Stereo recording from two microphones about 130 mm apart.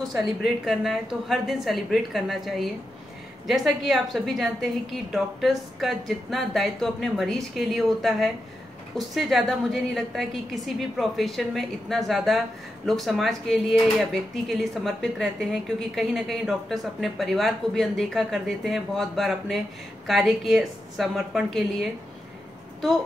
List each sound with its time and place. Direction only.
0.7 s speech: centre (ahead or behind)